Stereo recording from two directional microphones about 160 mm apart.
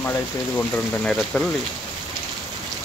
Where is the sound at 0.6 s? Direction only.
5° left (ahead or behind).